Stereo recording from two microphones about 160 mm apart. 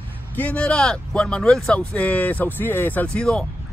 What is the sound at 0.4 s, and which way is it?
Speech, 10° left (ahead or behind).